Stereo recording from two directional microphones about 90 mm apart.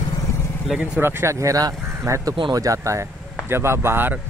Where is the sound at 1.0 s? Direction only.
25° right (ahead or behind).